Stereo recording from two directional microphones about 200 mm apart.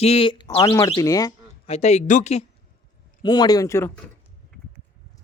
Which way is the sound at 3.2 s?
20° left (ahead or behind).